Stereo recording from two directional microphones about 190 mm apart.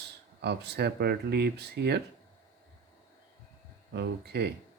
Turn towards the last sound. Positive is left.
turn(degrees=-65)  # may be behind; listen again after turning